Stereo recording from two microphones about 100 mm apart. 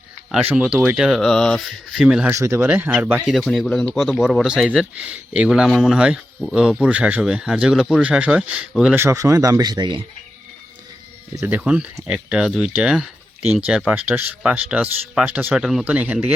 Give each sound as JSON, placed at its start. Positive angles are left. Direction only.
{"t": 0.6, "sound": "speech", "side_deg": -15}
{"t": 1.2, "sound": "speech", "side_deg": 5}
{"t": 2.3, "sound": "speech", "side_deg": -30}
{"t": 3.2, "sound": "speech", "side_deg": 0}
{"t": 9.0, "sound": "speech", "side_deg": -30}
{"t": 11.4, "sound": "speech", "side_deg": -15}
{"t": 15.5, "sound": "speech", "side_deg": -5}